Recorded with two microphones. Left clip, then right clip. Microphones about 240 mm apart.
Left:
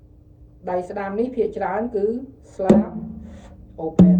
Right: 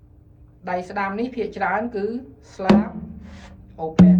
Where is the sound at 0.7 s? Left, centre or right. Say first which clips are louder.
Even; right.